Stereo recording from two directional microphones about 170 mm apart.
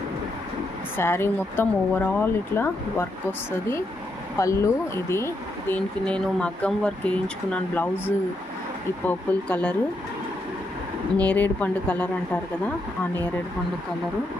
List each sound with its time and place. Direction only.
0.9 s speech: 15° left (ahead or behind)
9.0 s speech: 10° left (ahead or behind)
11.1 s speech: 10° left (ahead or behind)